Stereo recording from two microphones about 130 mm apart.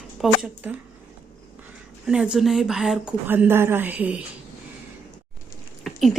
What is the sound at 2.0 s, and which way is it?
Speech, 5° right (ahead or behind).